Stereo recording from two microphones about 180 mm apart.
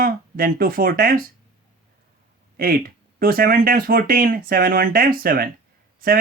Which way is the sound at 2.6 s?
55° right (ahead or behind).